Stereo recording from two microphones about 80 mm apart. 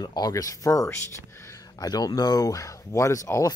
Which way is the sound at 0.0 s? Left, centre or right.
Left.